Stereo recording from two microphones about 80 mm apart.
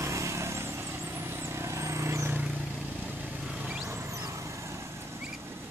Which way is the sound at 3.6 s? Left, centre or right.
Centre.